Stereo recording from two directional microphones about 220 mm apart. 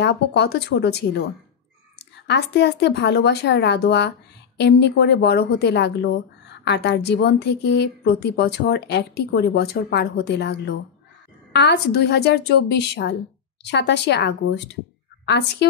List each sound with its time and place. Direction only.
0.0 s a woman's voice: 50° left (ahead or behind)
2.2 s a woman's voice: 50° left (ahead or behind)